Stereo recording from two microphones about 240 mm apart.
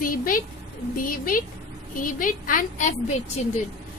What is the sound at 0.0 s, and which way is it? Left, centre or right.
A woman's voice, left.